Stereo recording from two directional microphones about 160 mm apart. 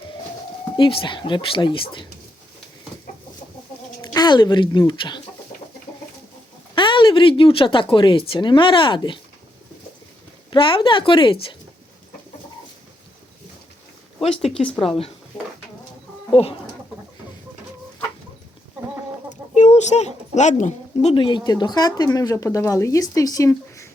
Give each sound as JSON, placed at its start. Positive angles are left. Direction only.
{"t": 0.8, "sound": "speech", "side_deg": 30}
{"t": 4.0, "sound": "speech", "side_deg": 25}
{"t": 6.7, "sound": "speech", "side_deg": 30}
{"t": 10.5, "sound": "speech", "side_deg": 30}
{"t": 14.2, "sound": "speech", "side_deg": 40}
{"t": 16.3, "sound": "speech", "side_deg": 35}
{"t": 19.3, "sound": "speech", "side_deg": 45}